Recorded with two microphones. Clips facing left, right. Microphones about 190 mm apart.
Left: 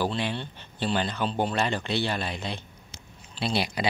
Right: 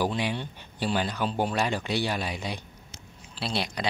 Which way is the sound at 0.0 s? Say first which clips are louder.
Even; 10° right (ahead or behind).